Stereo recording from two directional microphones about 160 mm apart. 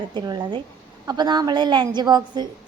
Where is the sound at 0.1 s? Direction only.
25° right (ahead or behind).